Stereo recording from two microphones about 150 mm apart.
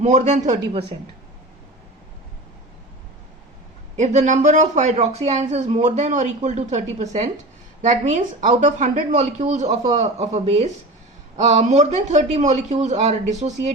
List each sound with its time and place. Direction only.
0.0 s speech: 50° right (ahead or behind)
3.9 s speech: 50° right (ahead or behind)